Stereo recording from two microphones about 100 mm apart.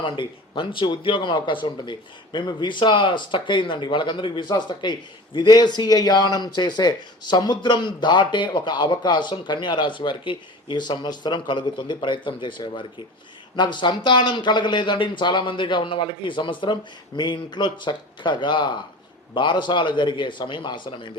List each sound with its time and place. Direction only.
0.0 s speech: 55° left (ahead or behind)